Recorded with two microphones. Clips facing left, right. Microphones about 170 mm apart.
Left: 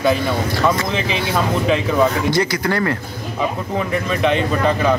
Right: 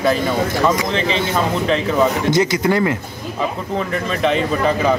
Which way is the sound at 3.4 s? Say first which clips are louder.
Even; 5° left (ahead or behind).